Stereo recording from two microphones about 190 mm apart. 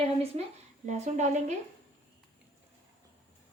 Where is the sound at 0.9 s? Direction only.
35° right (ahead or behind).